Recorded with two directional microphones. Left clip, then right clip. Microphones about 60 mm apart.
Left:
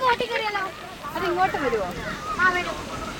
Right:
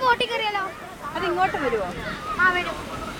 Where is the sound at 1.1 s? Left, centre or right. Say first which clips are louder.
Even; centre.